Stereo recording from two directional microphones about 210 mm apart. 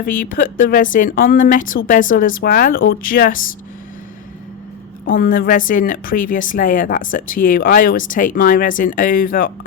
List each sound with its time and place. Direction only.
0.0 s speech: 45° left (ahead or behind)
5.1 s speech: 40° left (ahead or behind)